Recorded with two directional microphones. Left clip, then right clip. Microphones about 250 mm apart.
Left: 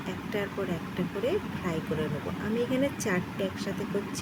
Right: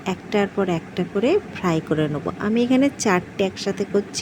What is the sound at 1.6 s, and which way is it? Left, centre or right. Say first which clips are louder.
Speech: right 10 dB; right.